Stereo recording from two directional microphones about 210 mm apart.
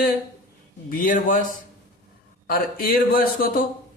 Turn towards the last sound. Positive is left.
turn(degrees=40)  # may be behind; listen again after turning